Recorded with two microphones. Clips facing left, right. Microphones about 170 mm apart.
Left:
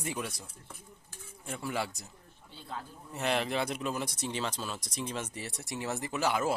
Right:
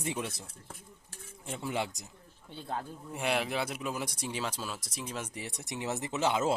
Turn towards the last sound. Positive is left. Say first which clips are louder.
# right 1 dB
turn(degrees=-20)  # may be behind; listen again after turning